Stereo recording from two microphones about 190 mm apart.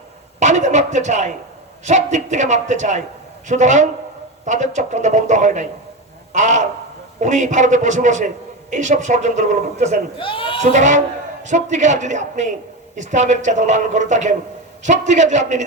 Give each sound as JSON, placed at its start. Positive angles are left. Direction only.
{"t": 0.3, "sound": "a woman's voice", "side_deg": -40}
{"t": 6.3, "sound": "crow", "side_deg": -40}
{"t": 7.2, "sound": "a woman's voice", "side_deg": -40}
{"t": 10.2, "sound": "speech", "side_deg": 25}
{"t": 10.6, "sound": "a woman's voice", "side_deg": -40}